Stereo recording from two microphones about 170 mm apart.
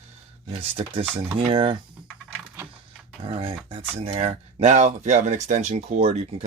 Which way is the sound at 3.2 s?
35° right (ahead or behind).